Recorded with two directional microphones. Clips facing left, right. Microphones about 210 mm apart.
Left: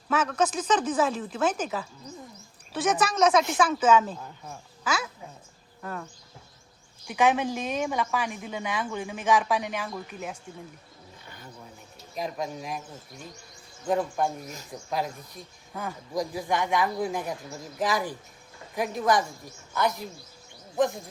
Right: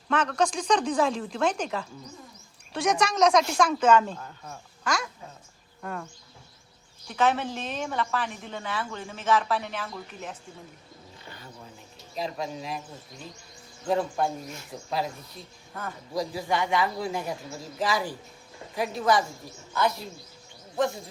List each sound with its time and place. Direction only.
0.1 s speech: 5° left (ahead or behind)
7.1 s a woman's voice: 15° left (ahead or behind)
12.1 s a woman's voice: 15° left (ahead or behind)
13.8 s a woman's voice: 10° left (ahead or behind)
18.9 s a woman's voice: 15° left (ahead or behind)